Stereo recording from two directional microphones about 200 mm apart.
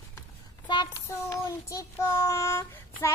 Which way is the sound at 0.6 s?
20° left (ahead or behind).